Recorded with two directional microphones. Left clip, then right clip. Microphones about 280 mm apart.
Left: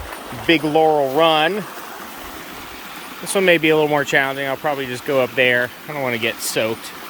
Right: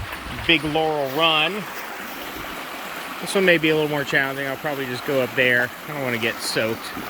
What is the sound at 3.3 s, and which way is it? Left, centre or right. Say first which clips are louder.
Speech: left 3 dB; centre.